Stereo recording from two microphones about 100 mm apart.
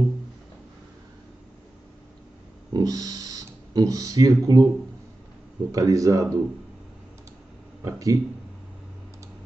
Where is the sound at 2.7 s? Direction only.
40° right (ahead or behind).